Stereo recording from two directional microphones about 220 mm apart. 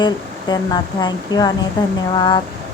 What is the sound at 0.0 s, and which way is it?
A woman's voice, 20° left (ahead or behind).